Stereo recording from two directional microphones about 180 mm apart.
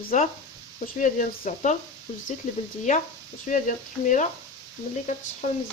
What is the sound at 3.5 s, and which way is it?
Speech, 45° left (ahead or behind).